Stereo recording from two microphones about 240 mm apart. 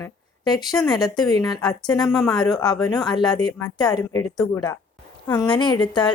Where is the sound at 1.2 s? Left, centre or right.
Centre.